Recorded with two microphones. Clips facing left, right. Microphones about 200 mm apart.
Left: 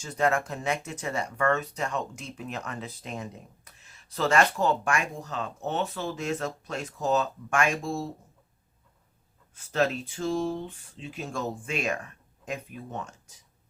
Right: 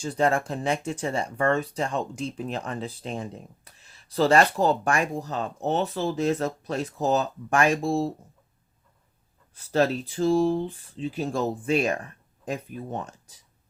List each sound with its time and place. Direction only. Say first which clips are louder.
0.0 s speech: right 3 dB; 30° right (ahead or behind)
9.6 s speech: right 4 dB; 35° right (ahead or behind)